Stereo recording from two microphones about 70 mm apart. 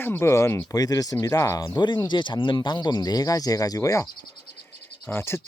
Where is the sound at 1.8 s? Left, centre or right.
Left.